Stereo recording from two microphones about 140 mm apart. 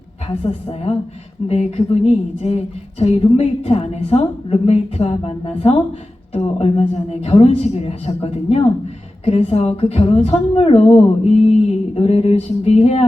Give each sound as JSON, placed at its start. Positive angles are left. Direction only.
{"t": 0.3, "sound": "a woman's voice", "side_deg": 45}